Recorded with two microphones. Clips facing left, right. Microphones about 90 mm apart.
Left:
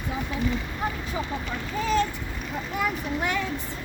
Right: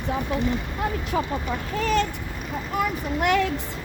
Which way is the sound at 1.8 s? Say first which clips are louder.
Right 1 dB; 70° right (ahead or behind).